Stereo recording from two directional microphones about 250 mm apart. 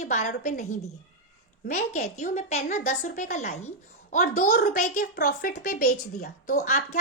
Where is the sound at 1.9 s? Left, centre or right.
Left.